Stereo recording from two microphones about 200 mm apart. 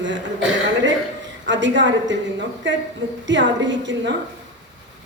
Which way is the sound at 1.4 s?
65° right (ahead or behind).